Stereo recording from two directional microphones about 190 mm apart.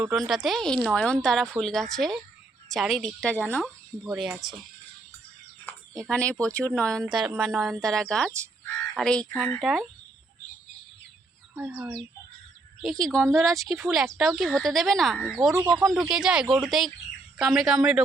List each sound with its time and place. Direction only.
0.0 s speech: centre (ahead or behind)
6.0 s speech: 5° left (ahead or behind)
11.5 s a child's voice: 10° right (ahead or behind)